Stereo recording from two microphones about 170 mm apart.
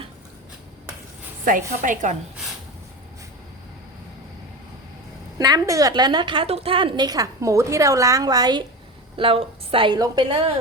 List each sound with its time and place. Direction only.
1.5 s a woman's voice: 50° right (ahead or behind)
5.4 s a woman's voice: 20° right (ahead or behind)